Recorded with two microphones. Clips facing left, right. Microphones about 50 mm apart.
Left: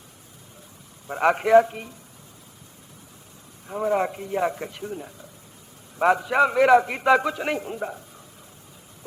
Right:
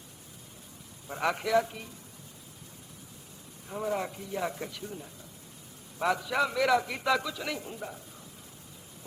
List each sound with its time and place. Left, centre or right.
1.0 s a man's voice: left
3.7 s speech: left
3.9 s a man's voice: left